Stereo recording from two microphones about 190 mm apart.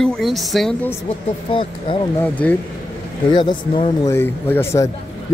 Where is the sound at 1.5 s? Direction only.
25° left (ahead or behind).